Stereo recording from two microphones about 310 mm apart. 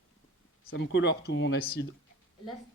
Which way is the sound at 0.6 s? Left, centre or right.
Left.